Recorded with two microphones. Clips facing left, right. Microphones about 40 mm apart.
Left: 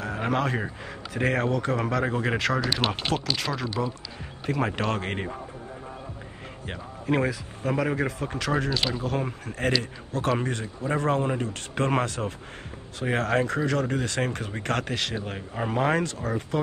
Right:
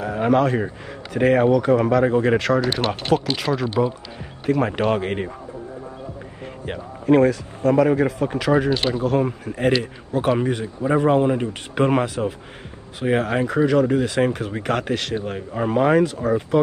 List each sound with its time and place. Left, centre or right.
0.0 s speech: centre
2.6 s speech: right
3.5 s speech: centre
4.5 s speech: centre
6.6 s a man's voice: centre
7.2 s speech: centre
8.6 s speech: right
9.0 s a man's voice: centre